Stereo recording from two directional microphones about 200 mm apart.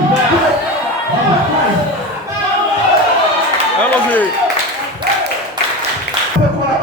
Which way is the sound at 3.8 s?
10° left (ahead or behind).